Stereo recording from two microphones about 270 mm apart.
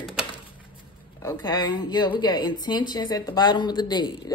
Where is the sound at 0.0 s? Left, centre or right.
Centre.